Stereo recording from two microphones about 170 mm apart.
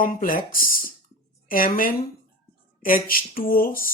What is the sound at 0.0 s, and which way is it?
Speech, 55° left (ahead or behind).